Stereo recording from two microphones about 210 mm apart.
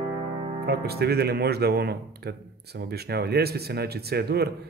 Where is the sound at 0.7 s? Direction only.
50° right (ahead or behind).